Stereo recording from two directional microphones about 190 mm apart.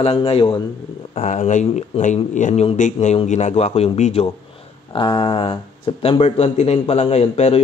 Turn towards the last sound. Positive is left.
turn(degrees=35)  # may be behind; listen again after turning